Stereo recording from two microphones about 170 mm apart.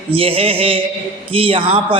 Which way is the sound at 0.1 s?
35° right (ahead or behind).